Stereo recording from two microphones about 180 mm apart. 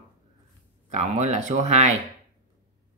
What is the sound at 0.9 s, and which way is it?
Speech, 40° right (ahead or behind).